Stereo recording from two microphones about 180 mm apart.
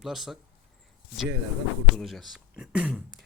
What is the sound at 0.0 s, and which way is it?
Speech, centre (ahead or behind).